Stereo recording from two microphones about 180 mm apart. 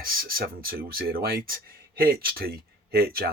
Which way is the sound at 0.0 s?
55° right (ahead or behind).